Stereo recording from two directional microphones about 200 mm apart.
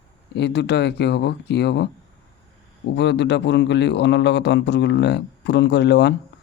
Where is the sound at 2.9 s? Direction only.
60° left (ahead or behind).